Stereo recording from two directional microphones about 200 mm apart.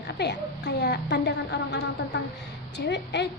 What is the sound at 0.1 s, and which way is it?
A woman's voice, 60° left (ahead or behind).